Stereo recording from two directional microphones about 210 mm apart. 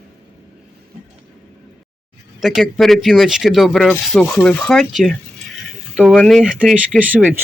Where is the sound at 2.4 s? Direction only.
Centre (ahead or behind).